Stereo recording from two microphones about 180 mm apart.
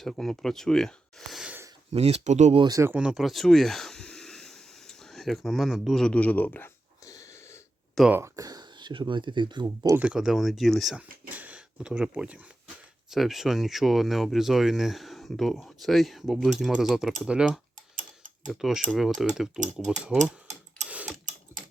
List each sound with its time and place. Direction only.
0.0 s speech: centre (ahead or behind)
1.9 s speech: 35° right (ahead or behind)
2.6 s a sound: 15° right (ahead or behind); by 7.6 s 15° left (ahead or behind)
7.9 s speech: 5° right (ahead or behind)
8.2 s speech: 20° right (ahead or behind)
9.6 s speech: 15° right (ahead or behind)
20.8 s sewing machine: 5° right (ahead or behind)